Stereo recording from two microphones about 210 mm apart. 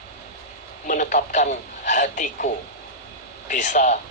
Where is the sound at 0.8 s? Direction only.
40° left (ahead or behind).